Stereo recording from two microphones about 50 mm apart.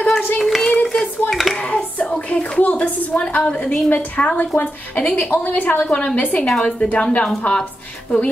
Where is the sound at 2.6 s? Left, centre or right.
Left.